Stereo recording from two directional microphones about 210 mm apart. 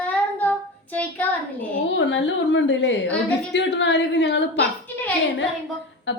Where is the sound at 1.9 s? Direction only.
60° left (ahead or behind).